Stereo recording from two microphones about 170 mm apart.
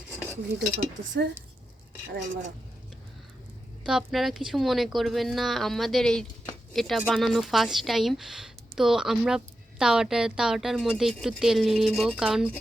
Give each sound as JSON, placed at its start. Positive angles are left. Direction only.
{"t": 0.1, "sound": "cutlery", "side_deg": -10}
{"t": 0.8, "sound": "speech", "side_deg": -75}
{"t": 3.8, "sound": "a woman's voice", "side_deg": 0}